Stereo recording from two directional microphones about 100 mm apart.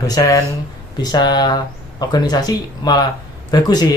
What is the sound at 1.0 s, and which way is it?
Speech, 45° left (ahead or behind).